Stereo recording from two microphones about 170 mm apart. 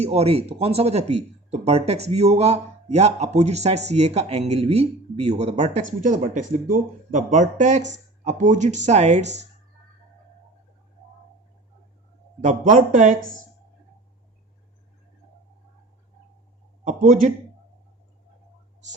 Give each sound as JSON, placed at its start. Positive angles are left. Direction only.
{"t": 0.0, "sound": "speech", "side_deg": -35}
{"t": 12.4, "sound": "a man's voice", "side_deg": -50}
{"t": 16.8, "sound": "a man's voice", "side_deg": -50}